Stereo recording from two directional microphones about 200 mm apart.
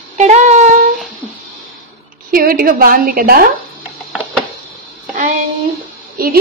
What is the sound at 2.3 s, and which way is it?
A woman's voice, 45° right (ahead or behind).